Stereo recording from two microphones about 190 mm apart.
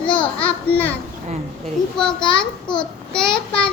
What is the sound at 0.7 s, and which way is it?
Speech, 10° left (ahead or behind).